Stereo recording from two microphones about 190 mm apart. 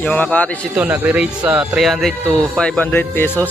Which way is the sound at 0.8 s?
10° right (ahead or behind).